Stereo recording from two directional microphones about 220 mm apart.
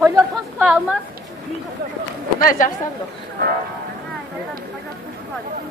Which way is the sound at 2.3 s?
40° left (ahead or behind).